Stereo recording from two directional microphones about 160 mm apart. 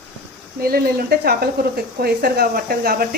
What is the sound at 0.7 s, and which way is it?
Speech, 75° right (ahead or behind).